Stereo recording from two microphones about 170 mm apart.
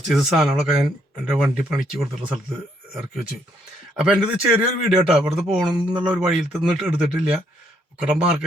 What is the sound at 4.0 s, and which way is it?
Speech, 5° right (ahead or behind).